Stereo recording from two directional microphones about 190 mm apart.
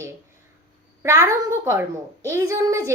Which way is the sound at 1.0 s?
15° right (ahead or behind).